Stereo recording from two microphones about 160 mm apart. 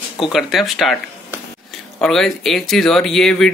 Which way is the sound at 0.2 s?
Centre (ahead or behind).